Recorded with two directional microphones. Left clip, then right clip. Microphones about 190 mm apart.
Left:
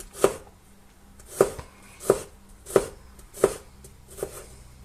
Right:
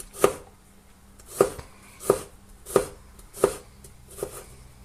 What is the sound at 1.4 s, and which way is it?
Chopping, centre (ahead or behind).